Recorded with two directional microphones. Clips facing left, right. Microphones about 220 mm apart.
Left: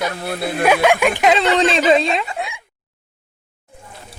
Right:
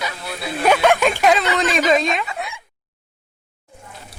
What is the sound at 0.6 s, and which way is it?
Speech, 10° left (ahead or behind).